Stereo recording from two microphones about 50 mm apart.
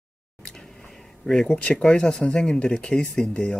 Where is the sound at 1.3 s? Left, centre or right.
Centre.